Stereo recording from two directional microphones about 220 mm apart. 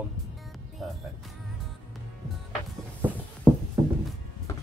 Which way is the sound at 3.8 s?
20° right (ahead or behind).